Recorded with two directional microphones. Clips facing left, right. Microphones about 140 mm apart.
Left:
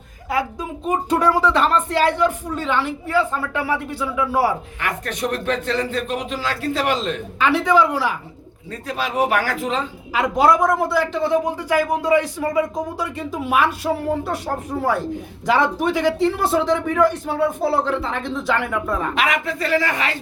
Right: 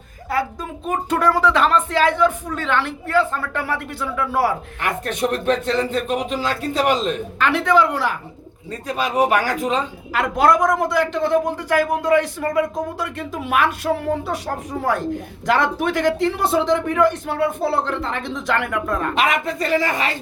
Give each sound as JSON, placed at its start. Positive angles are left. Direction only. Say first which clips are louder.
{"t": 0.3, "sound": "speech", "louder": "even", "side_deg": 15}
{"t": 5.0, "sound": "speech", "louder": "right 4 dB", "side_deg": -20}
{"t": 7.3, "sound": "speech", "louder": "left 1 dB", "side_deg": 5}
{"t": 8.9, "sound": "speech", "louder": "right 2 dB", "side_deg": -15}
{"t": 10.2, "sound": "a woman's voice", "louder": "even", "side_deg": 10}
{"t": 19.1, "sound": "speech", "louder": "right 1 dB", "side_deg": -20}